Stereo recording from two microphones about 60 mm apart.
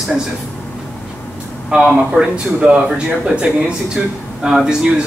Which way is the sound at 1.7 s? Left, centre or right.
Centre.